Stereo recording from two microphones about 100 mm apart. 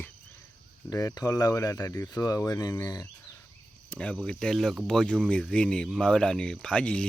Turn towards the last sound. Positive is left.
turn(degrees=10)  # may be behind; listen again after turning